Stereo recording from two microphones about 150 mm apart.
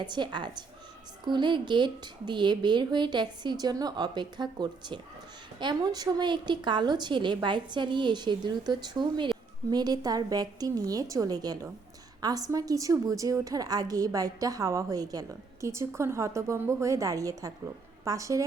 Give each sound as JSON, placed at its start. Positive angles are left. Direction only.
{"t": 0.0, "sound": "a woman's voice", "side_deg": -30}